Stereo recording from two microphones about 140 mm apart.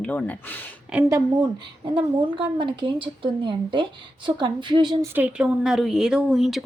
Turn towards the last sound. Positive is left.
turn(degrees=0)  # may be behind; listen again after turning